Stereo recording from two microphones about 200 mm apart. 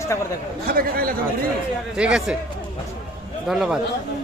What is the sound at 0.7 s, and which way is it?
Speech, 50° right (ahead or behind).